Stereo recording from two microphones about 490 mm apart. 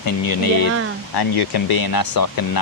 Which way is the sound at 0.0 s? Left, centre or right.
Left.